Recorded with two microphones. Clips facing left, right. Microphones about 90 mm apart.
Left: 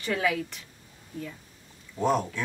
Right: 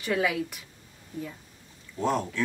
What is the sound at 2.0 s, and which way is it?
Speech, 15° left (ahead or behind).